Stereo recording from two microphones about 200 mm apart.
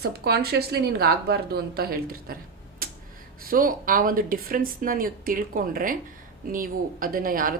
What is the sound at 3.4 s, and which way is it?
Speech, 45° right (ahead or behind).